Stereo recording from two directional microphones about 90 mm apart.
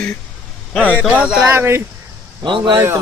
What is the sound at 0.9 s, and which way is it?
Speech, 10° right (ahead or behind).